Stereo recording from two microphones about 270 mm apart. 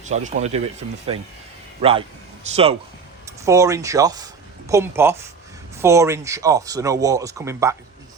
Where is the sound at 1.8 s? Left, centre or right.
Right.